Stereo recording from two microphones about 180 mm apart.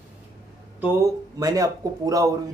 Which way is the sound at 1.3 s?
20° right (ahead or behind).